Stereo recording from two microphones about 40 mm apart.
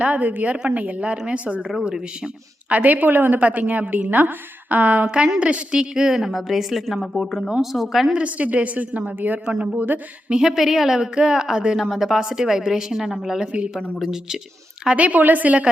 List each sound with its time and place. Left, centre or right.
0.0 s a woman's voice: right
1.8 s a woman's voice: centre
2.6 s a woman's voice: right
3.4 s a woman's voice: right
5.0 s a woman's voice: right
5.7 s a woman's voice: centre
6.1 s a woman's voice: centre
7.6 s a woman's voice: centre
8.1 s a woman's voice: right
10.2 s a woman's voice: centre
11.9 s a woman's voice: centre
14.9 s a woman's voice: right